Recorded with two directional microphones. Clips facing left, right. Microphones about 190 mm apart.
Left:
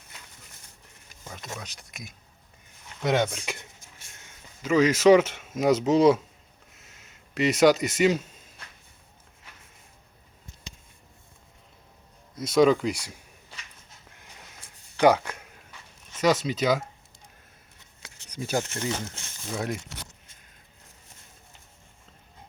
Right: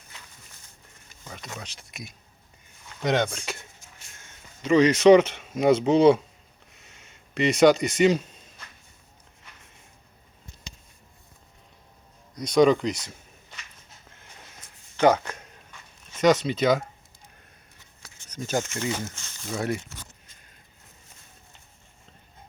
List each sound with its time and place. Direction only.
1.5 s speech: centre (ahead or behind)
3.2 s speech: 15° left (ahead or behind)
4.6 s speech: 5° left (ahead or behind)
6.7 s a sound: 5° left (ahead or behind)
12.3 s speech: 5° left (ahead or behind)
14.9 s a sound: 10° left (ahead or behind)
18.3 s speech: 10° left (ahead or behind)